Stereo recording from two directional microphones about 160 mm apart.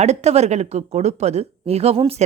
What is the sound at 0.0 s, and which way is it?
Speech, 45° right (ahead or behind).